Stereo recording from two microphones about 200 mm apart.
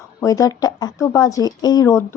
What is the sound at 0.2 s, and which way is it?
A woman's voice, 15° left (ahead or behind).